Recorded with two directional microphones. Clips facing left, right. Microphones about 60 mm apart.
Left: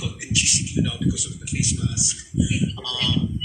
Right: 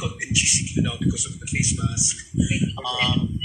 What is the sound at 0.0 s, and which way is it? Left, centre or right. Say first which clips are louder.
A man's voice: right 1 dB; right.